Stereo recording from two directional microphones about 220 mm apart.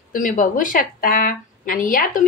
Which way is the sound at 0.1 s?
35° left (ahead or behind).